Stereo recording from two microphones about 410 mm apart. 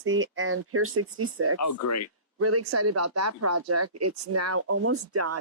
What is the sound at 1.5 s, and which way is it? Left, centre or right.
Speech, left.